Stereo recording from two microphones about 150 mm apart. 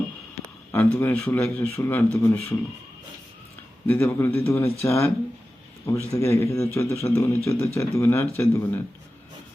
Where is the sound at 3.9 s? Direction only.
15° left (ahead or behind).